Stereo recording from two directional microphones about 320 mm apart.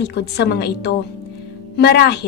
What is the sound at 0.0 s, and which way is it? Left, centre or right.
Speech, left.